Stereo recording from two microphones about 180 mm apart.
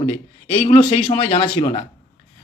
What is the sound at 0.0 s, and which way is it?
A man's voice, 35° left (ahead or behind).